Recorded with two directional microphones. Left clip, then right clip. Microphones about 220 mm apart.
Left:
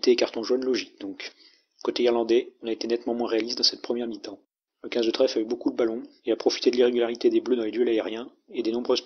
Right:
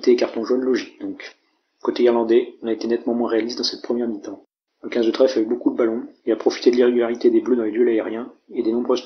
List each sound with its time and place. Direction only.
0.0 s speech: 35° left (ahead or behind)